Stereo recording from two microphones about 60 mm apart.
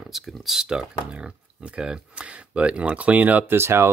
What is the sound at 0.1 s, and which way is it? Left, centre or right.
Speech, centre.